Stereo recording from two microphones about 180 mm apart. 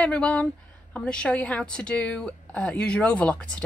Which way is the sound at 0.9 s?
5° left (ahead or behind).